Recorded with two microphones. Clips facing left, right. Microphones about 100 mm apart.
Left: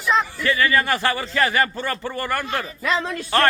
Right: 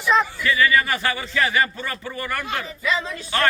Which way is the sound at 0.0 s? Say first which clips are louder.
Right 1 dB; centre (ahead or behind).